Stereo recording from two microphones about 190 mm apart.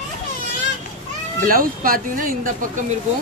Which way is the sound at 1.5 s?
50° right (ahead or behind).